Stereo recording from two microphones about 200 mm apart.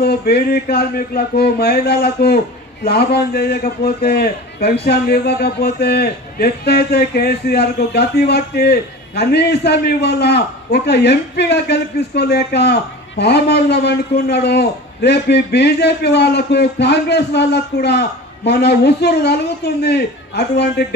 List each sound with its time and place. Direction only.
0.0 s a man's voice: 55° left (ahead or behind)